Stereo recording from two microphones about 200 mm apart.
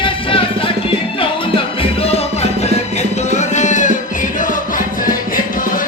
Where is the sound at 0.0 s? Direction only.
25° left (ahead or behind).